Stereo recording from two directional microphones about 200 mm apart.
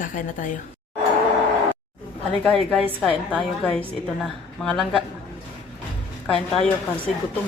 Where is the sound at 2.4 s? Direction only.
5° left (ahead or behind).